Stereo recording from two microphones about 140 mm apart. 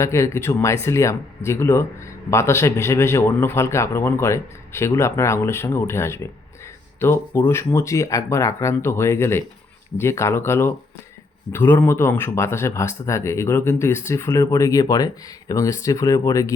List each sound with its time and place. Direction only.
0.0 s speech: 20° left (ahead or behind)